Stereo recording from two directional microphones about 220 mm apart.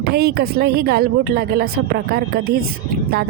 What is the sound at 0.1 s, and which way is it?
Speech, 45° right (ahead or behind).